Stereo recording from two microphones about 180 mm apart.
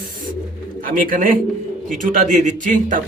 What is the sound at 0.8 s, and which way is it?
Speech, 50° right (ahead or behind).